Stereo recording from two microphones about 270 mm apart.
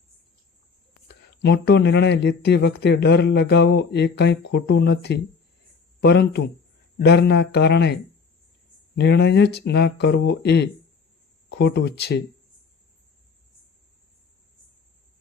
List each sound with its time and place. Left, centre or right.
1.0 s speech: left
9.0 s speech: left